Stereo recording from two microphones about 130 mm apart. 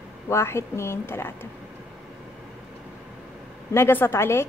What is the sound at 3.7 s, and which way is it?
Speech, 20° left (ahead or behind).